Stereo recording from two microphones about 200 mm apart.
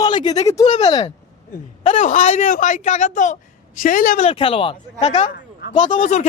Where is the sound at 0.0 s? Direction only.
20° left (ahead or behind).